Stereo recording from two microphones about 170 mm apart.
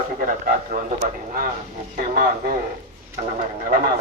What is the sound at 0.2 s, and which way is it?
A man's voice, 50° right (ahead or behind).